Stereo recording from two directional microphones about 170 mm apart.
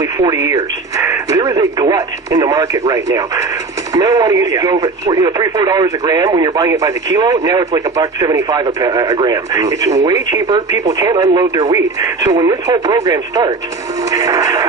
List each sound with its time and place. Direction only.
0.0 s speech: 20° right (ahead or behind)